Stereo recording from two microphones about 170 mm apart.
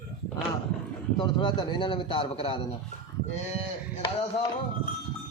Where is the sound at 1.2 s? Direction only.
25° left (ahead or behind).